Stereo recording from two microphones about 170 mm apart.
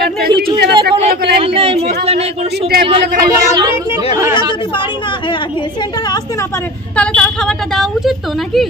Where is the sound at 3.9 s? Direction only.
30° left (ahead or behind).